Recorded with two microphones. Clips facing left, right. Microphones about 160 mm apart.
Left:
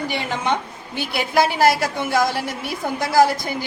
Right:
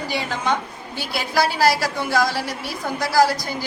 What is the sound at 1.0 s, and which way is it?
A woman's voice, 20° left (ahead or behind).